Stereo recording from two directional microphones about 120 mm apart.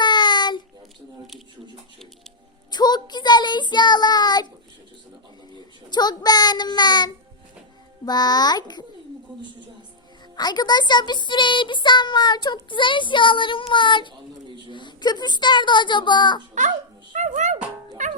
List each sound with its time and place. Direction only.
0.0 s child singing: 40° left (ahead or behind)
2.7 s child singing: 35° left (ahead or behind)
5.9 s child singing: 35° left (ahead or behind)
8.0 s speech: 35° left (ahead or behind)
10.3 s speech: 35° left (ahead or behind)
12.7 s child singing: 45° left (ahead or behind)
14.7 s speech: 40° left (ahead or behind)
16.6 s music: 90° right